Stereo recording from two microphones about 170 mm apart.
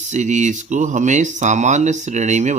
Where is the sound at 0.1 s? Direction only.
45° right (ahead or behind).